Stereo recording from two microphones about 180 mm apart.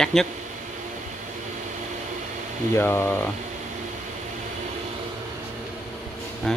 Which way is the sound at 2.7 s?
15° left (ahead or behind).